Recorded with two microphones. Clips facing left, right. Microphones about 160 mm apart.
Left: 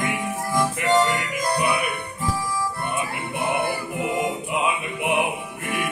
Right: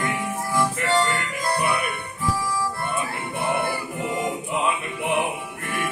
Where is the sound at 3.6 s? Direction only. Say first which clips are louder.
Left 2 dB; 10° left (ahead or behind).